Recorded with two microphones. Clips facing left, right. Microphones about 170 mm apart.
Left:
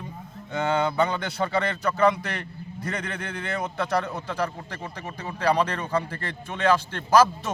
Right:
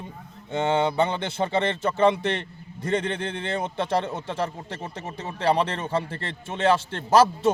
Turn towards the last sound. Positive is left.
turn(degrees=-25)  # may be behind; listen again after turning